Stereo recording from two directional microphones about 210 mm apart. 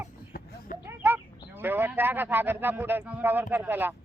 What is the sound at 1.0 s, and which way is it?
Speech, 10° right (ahead or behind).